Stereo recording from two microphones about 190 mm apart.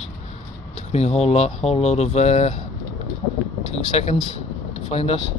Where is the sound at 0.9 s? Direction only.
35° left (ahead or behind).